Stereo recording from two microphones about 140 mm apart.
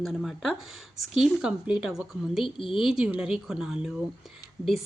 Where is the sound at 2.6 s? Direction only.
40° left (ahead or behind).